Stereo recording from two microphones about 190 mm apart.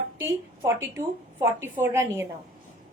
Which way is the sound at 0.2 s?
15° right (ahead or behind).